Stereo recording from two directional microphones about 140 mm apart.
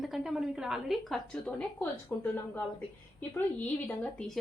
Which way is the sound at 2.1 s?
15° left (ahead or behind).